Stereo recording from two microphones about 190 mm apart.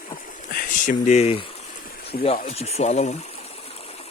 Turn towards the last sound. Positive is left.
turn(degrees=35)  # may be behind; listen again after turning